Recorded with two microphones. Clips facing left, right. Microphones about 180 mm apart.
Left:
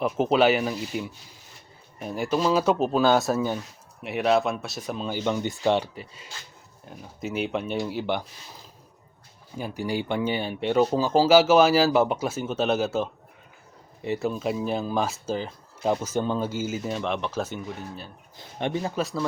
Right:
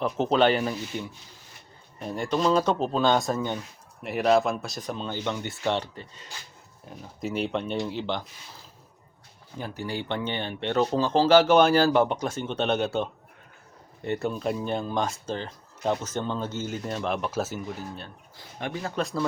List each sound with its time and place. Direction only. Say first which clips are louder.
0.0 s speech: left 1 dB; 5° left (ahead or behind)
9.6 s speech: left 4 dB; 10° left (ahead or behind)
18.3 s speech: left 5 dB; 20° left (ahead or behind)
18.9 s speech: left 1 dB; centre (ahead or behind)